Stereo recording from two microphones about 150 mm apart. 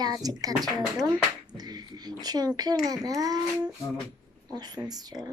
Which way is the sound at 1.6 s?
25° right (ahead or behind).